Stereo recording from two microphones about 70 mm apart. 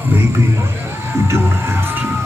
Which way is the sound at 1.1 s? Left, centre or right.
Right.